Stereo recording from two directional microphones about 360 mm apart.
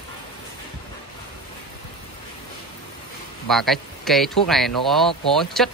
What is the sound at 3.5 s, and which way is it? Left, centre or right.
Speech, centre.